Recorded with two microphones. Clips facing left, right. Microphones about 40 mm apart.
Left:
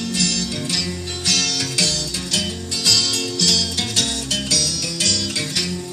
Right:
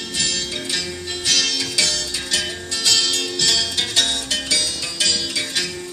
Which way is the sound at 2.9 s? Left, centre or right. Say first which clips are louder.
Even; right.